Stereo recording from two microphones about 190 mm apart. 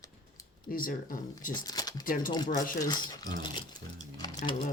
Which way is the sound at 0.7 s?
45° left (ahead or behind).